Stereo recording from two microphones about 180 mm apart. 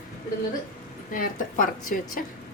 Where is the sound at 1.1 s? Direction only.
50° left (ahead or behind).